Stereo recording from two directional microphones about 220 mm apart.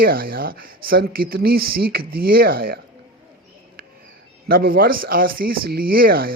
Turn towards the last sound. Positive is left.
turn(degrees=-40)  # may be behind; listen again after turning